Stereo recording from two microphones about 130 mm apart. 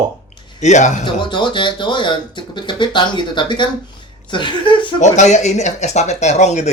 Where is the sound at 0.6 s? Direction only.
65° left (ahead or behind).